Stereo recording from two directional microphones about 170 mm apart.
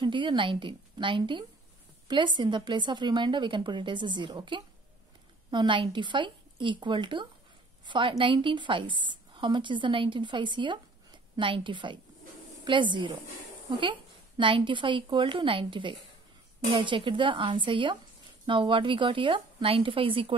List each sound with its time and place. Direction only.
0.0 s a woman's voice: 30° right (ahead or behind)